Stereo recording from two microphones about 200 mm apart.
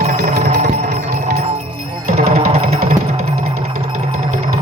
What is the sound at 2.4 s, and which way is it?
Music, 30° right (ahead or behind).